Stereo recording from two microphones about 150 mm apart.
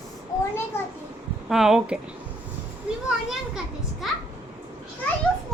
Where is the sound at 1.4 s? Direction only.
5° right (ahead or behind).